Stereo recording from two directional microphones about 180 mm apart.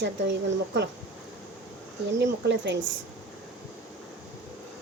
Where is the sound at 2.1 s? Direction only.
70° right (ahead or behind).